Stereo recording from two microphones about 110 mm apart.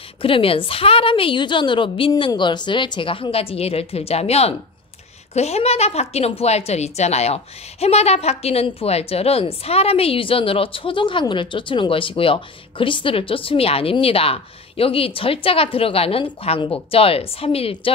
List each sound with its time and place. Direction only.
0.2 s a woman's voice: 55° left (ahead or behind)